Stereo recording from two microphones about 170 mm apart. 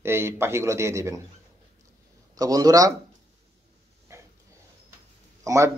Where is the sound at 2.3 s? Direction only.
20° right (ahead or behind).